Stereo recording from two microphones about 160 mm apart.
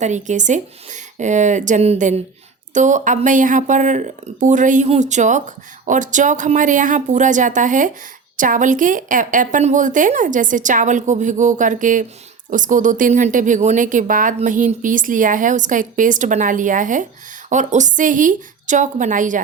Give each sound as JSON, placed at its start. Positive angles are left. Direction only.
{"t": 0.0, "sound": "a woman's voice", "side_deg": -50}